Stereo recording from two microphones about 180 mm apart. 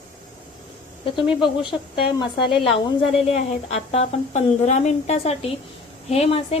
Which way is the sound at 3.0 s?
Centre (ahead or behind).